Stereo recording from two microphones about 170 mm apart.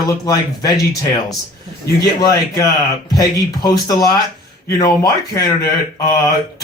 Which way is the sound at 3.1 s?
20° left (ahead or behind).